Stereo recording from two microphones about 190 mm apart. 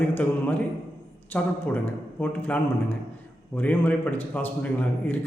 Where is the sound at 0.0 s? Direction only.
10° left (ahead or behind).